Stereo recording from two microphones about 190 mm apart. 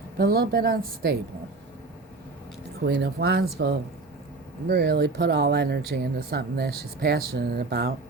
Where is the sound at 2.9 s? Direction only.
60° right (ahead or behind).